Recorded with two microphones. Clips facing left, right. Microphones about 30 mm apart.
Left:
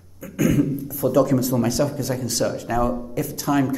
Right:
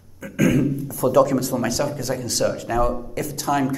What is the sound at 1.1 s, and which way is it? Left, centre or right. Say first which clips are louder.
Speech: right 1 dB; right.